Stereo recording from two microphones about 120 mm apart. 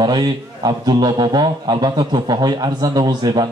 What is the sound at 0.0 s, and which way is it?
A man's voice, 35° right (ahead or behind).